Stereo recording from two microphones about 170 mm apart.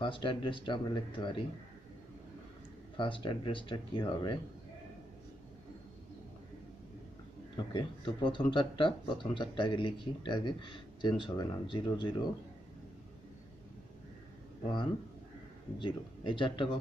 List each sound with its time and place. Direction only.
0.0 s speech: 30° left (ahead or behind)
3.0 s speech: 30° left (ahead or behind)
7.5 s speech: 30° left (ahead or behind)
15.8 s speech: 30° left (ahead or behind)